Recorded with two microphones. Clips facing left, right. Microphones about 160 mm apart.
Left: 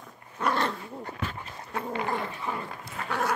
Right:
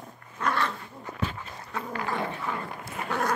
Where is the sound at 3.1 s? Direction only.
10° left (ahead or behind).